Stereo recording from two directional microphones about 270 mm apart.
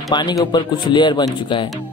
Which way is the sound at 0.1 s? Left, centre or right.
Centre.